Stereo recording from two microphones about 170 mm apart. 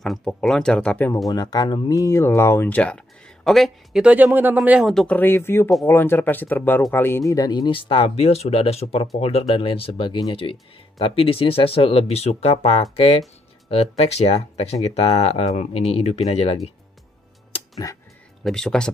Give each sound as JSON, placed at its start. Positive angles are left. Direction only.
{"t": 0.0, "sound": "speech", "side_deg": 5}
{"t": 1.3, "sound": "speech", "side_deg": 20}
{"t": 18.4, "sound": "speech", "side_deg": 5}